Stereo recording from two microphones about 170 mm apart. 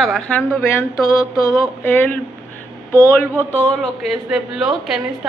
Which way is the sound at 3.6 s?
5° left (ahead or behind).